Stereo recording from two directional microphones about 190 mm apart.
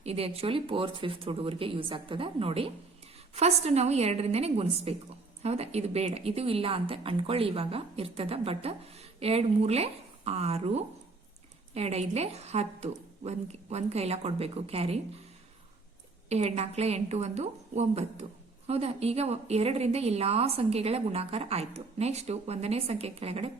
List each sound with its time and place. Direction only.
0.0 s a woman's voice: 30° right (ahead or behind)
16.3 s a woman's voice: 35° right (ahead or behind)